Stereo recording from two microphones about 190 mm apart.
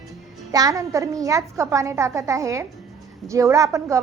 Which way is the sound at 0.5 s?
20° right (ahead or behind).